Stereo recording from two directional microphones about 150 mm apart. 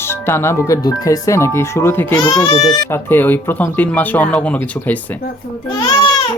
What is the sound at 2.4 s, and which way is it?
Speech, 30° left (ahead or behind).